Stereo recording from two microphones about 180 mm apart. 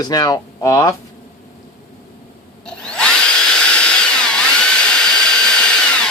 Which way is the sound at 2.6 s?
5° left (ahead or behind).